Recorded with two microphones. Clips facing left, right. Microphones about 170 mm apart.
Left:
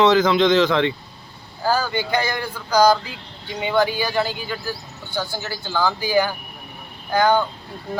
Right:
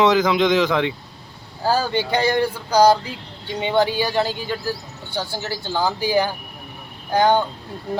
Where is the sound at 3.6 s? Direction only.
25° right (ahead or behind).